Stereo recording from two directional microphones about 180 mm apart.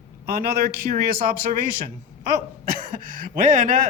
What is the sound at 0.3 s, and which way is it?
Speech, 55° right (ahead or behind).